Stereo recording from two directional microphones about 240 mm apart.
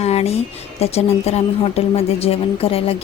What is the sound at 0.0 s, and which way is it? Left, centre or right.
Speech, left.